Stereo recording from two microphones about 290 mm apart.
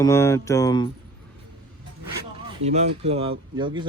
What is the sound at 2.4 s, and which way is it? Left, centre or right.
Speech, right.